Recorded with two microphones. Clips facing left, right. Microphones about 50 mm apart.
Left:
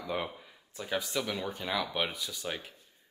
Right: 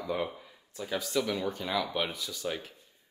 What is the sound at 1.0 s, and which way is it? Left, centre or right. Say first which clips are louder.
Speech: right 4 dB; centre.